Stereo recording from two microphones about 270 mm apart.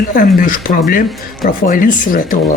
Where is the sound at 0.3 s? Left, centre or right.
Left.